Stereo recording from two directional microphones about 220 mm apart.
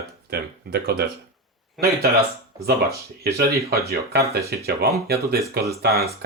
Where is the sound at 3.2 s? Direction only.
45° right (ahead or behind).